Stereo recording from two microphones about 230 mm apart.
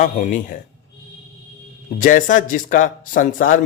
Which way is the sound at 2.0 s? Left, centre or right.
Left.